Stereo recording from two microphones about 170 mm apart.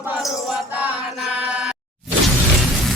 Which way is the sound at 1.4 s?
5° right (ahead or behind).